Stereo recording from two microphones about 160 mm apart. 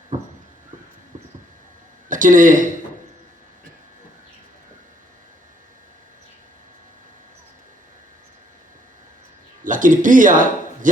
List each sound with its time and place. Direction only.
2.0 s speech: 55° right (ahead or behind)
9.6 s speech: 55° right (ahead or behind)